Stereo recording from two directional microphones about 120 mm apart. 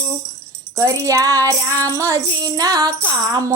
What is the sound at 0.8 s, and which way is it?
Music, 30° right (ahead or behind).